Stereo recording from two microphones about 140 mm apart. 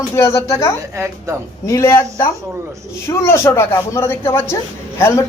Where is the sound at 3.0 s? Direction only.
20° left (ahead or behind).